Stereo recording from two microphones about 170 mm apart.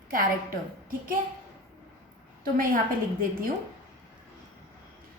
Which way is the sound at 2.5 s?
55° right (ahead or behind).